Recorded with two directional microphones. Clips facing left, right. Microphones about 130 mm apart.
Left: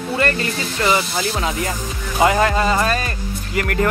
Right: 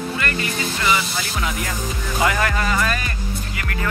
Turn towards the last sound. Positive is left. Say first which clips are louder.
# left 9 dB
turn(degrees=45)  # may be behind; listen again after turning